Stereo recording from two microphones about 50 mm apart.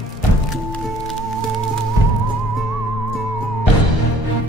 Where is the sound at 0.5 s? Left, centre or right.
Centre.